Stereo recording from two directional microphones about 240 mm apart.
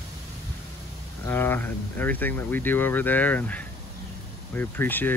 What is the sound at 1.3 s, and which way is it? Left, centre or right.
Speech, centre.